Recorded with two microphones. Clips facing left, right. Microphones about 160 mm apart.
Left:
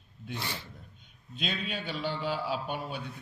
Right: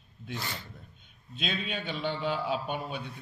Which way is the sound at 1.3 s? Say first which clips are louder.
Right 1 dB; centre (ahead or behind).